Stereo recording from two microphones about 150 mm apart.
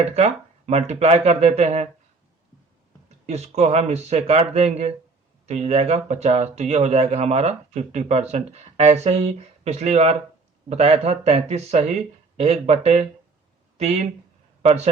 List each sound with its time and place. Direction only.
0.0 s speech: 45° right (ahead or behind)
3.1 s a man's voice: 45° right (ahead or behind)